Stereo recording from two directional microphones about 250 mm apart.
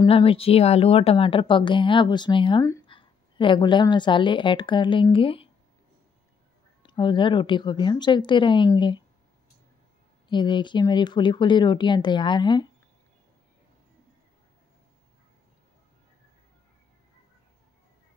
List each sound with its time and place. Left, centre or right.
0.0 s a woman's voice: left
6.8 s a woman's voice: centre
10.2 s speech: centre